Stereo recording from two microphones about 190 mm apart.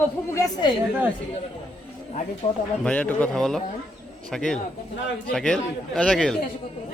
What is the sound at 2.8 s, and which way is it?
Speech, 5° left (ahead or behind).